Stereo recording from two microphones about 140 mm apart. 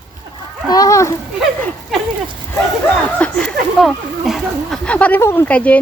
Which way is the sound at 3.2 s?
5° left (ahead or behind).